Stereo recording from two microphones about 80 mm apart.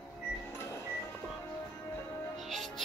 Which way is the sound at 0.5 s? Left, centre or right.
Left.